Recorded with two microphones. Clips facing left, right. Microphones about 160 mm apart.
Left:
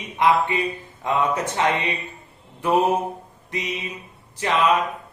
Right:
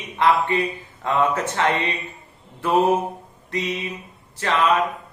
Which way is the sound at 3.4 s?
15° left (ahead or behind).